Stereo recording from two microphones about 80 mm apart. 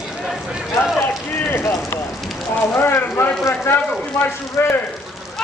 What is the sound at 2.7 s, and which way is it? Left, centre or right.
Speech, left.